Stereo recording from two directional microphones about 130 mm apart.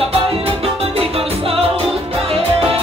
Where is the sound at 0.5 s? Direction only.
50° right (ahead or behind).